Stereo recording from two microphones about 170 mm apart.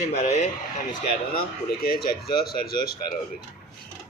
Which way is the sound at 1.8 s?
65° left (ahead or behind).